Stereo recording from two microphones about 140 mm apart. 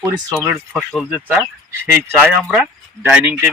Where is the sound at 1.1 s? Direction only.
10° right (ahead or behind).